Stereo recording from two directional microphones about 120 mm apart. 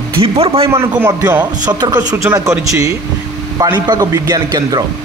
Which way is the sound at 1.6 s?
35° right (ahead or behind).